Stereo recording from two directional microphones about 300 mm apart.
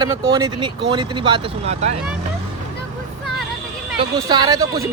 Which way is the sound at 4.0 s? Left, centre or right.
Centre.